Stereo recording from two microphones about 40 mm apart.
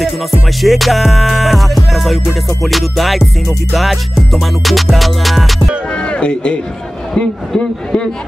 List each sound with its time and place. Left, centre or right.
0.6 s music: centre
5.9 s a man's voice: left